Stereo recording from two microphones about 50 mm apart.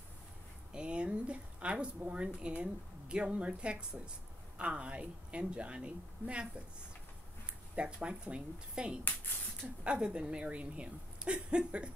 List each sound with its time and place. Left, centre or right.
0.7 s a sound: right
2.0 s speech: right
7.7 s speech: right